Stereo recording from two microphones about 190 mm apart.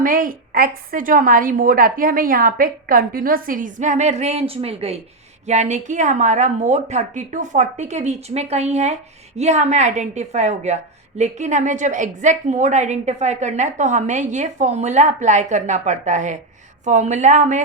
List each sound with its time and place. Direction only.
0.0 s a woman's voice: 50° right (ahead or behind)